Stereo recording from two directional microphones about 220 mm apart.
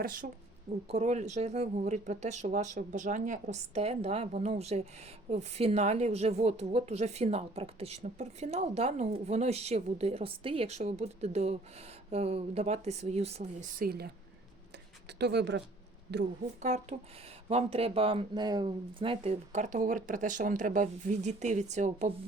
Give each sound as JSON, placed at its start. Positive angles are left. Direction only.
{"t": 0.0, "sound": "a woman's voice", "side_deg": -40}
{"t": 15.2, "sound": "speech", "side_deg": -50}
{"t": 16.6, "sound": "speech", "side_deg": -30}